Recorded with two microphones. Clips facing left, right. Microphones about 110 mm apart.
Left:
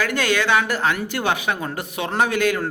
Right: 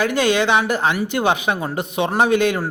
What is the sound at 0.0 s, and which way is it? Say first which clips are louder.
A man's voice: right 4 dB; 20° right (ahead or behind).